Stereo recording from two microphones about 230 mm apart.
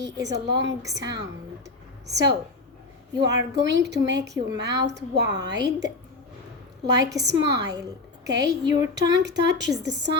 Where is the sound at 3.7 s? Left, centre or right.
Right.